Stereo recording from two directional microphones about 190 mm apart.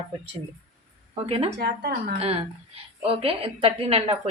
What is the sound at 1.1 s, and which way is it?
Speech, 30° right (ahead or behind).